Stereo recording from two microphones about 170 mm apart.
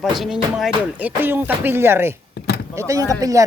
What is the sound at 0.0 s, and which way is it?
A woman's voice, centre (ahead or behind).